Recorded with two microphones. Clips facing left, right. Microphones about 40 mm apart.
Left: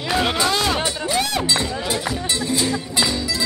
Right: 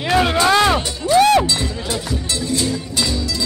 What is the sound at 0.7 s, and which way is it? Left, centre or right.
Music, centre.